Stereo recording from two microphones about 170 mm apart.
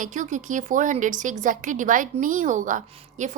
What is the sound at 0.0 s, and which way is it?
A woman's voice, 50° right (ahead or behind).